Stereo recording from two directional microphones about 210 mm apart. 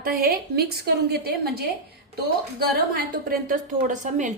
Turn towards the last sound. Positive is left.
turn(degrees=-35)  # may be behind; listen again after turning